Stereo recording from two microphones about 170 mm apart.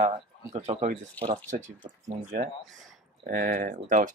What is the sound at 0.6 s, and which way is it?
Speech, 40° right (ahead or behind).